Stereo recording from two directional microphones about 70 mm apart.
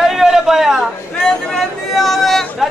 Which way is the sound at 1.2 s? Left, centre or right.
Centre.